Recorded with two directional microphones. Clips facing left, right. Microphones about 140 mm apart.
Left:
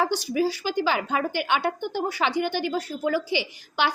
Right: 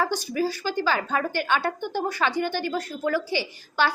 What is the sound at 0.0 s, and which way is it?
A woman's voice, 15° left (ahead or behind).